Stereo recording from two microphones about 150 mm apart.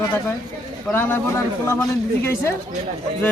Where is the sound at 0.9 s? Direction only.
15° left (ahead or behind).